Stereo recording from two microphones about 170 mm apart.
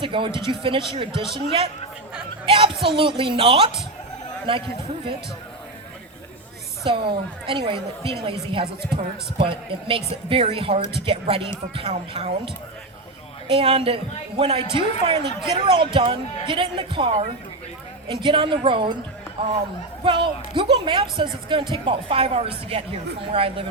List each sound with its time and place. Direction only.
0.0 s a woman's voice: 30° right (ahead or behind)
2.8 s a woman's voice: 30° right (ahead or behind)
6.8 s a woman's voice: 30° right (ahead or behind)
13.5 s a woman's voice: 35° right (ahead or behind)
20.1 s a woman's voice: 30° right (ahead or behind)